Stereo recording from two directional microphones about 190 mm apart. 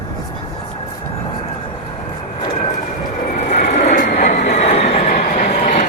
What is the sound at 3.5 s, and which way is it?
Vehicle, 35° left (ahead or behind).